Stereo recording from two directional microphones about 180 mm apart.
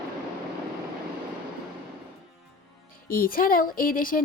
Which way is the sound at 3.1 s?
55° left (ahead or behind).